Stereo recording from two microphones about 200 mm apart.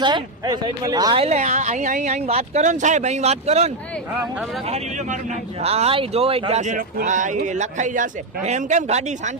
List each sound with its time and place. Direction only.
0.0 s speech: 20° right (ahead or behind)